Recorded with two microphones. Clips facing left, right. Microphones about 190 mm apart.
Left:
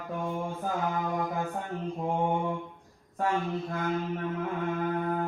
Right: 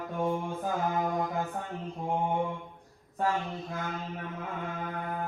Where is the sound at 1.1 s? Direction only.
Centre (ahead or behind).